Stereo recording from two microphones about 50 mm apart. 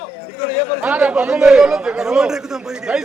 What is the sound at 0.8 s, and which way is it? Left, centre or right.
A man's voice, right.